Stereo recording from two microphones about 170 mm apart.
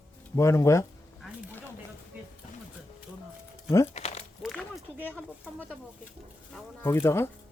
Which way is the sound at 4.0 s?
40° left (ahead or behind).